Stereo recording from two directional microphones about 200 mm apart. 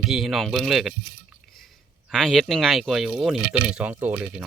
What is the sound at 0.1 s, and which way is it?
Speech, centre (ahead or behind).